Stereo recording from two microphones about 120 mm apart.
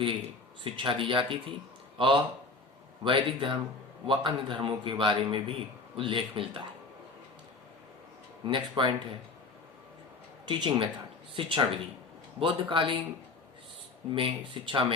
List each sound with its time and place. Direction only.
0.6 s a man's voice: 45° right (ahead or behind)
8.4 s speech: 40° right (ahead or behind)
10.4 s a man's voice: 40° right (ahead or behind)
14.1 s a man's voice: 45° right (ahead or behind)